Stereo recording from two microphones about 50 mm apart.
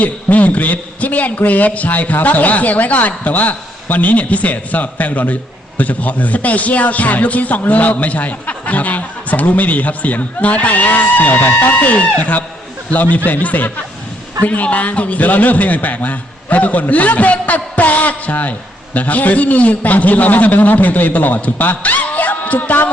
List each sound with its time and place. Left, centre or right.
0.0 s a man's voice: left